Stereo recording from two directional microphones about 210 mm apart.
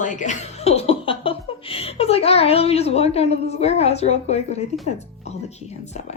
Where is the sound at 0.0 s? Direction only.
35° left (ahead or behind).